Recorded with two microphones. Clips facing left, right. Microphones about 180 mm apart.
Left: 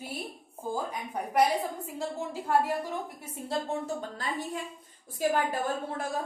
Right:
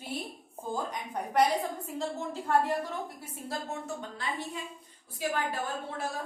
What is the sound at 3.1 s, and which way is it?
Speech, 30° left (ahead or behind).